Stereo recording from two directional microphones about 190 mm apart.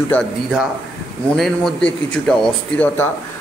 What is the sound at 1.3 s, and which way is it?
A man's voice, centre (ahead or behind).